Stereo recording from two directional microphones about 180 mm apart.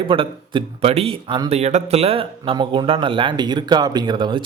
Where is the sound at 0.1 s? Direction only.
30° right (ahead or behind).